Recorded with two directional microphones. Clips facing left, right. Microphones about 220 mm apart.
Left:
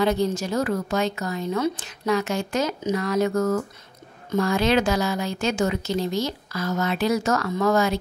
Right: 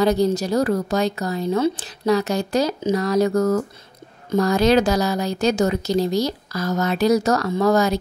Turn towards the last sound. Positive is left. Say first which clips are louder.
# right 3 dB
turn(degrees=-35)  # may be behind; listen again after turning